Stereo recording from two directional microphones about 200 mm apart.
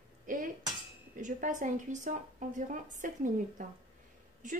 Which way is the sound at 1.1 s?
40° right (ahead or behind).